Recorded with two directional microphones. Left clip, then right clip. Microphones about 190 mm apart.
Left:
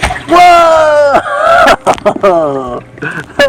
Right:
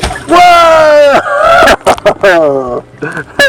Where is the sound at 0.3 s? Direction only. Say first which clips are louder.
Right 1 dB; 25° left (ahead or behind).